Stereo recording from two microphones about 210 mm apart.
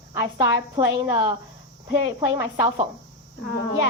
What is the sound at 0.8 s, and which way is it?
Speech, 65° left (ahead or behind).